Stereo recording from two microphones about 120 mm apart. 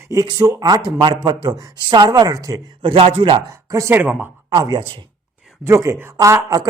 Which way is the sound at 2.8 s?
50° right (ahead or behind).